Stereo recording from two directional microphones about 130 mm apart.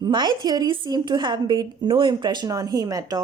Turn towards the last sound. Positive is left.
turn(degrees=-30)  # may be behind; listen again after turning